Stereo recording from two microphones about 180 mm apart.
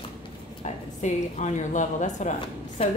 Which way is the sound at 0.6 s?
40° left (ahead or behind).